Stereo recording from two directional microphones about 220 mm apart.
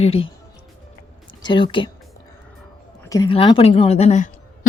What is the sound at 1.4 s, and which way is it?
Speech, 20° left (ahead or behind).